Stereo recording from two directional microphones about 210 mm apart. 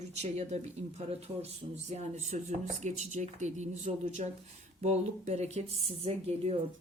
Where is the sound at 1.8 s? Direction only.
30° right (ahead or behind).